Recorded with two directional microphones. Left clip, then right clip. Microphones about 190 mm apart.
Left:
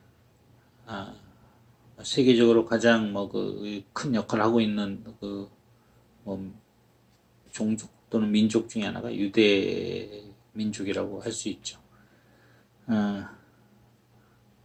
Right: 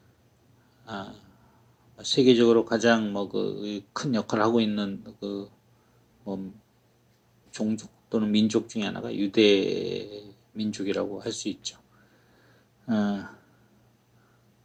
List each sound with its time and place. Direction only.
0.9 s a sound: 50° right (ahead or behind)
2.0 s speech: 50° right (ahead or behind)
7.5 s speech: 50° right (ahead or behind)
12.8 s speech: 50° right (ahead or behind)